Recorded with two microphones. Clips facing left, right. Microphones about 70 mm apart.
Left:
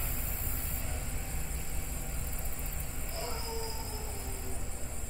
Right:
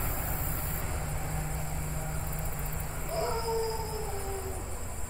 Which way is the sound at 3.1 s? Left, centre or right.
Right.